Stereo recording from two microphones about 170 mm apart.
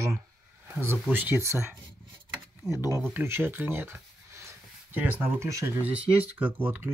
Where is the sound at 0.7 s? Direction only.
15° right (ahead or behind).